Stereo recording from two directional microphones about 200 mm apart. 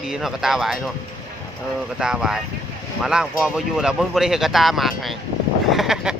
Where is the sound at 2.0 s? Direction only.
5° right (ahead or behind).